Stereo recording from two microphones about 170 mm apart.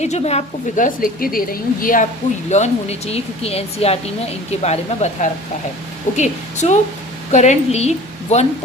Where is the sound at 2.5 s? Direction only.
40° left (ahead or behind).